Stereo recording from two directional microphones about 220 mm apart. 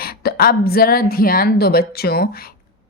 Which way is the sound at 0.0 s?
45° left (ahead or behind).